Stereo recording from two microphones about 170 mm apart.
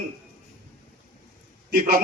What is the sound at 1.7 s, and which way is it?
Speech, 55° right (ahead or behind).